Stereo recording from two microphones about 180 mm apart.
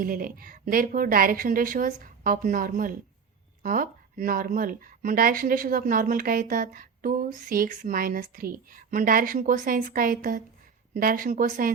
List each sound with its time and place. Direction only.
0.0 s speech: 50° right (ahead or behind)